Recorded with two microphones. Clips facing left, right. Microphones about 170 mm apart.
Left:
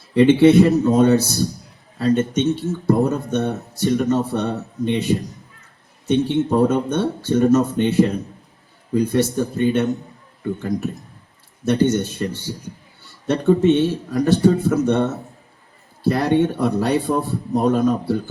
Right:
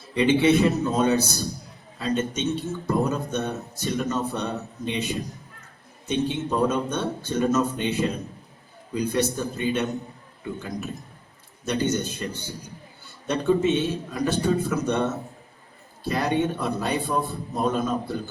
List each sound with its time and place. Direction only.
0.1 s speech: 55° left (ahead or behind)
13.3 s speech: 55° left (ahead or behind)